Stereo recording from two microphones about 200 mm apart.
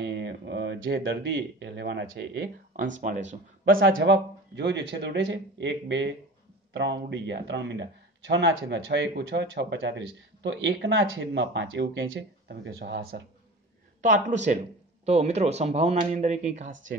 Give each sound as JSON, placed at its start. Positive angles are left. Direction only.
{"t": 0.0, "sound": "a sound", "side_deg": -60}
{"t": 1.6, "sound": "speech", "side_deg": -60}
{"t": 3.0, "sound": "speech", "side_deg": -40}
{"t": 3.9, "sound": "speech", "side_deg": -60}
{"t": 14.0, "sound": "speech", "side_deg": -40}